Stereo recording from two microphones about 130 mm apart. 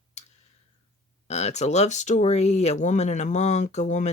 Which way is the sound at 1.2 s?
60° left (ahead or behind).